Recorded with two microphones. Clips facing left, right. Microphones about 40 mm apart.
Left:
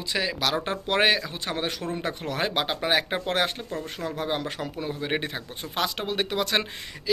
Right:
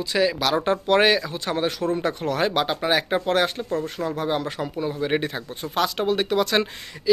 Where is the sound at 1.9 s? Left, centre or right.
Centre.